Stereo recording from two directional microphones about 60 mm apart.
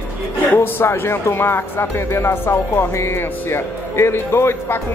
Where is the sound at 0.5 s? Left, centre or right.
Left.